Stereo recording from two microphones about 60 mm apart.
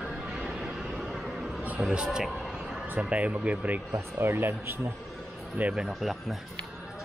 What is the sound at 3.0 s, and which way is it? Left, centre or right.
Speech, right.